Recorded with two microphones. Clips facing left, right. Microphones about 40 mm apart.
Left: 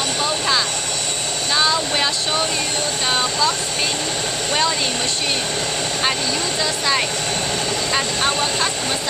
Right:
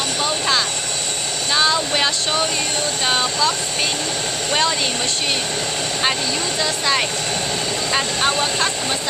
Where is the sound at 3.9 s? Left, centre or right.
Left.